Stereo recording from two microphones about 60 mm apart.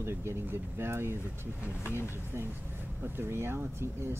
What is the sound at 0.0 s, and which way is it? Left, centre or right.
Speech, right.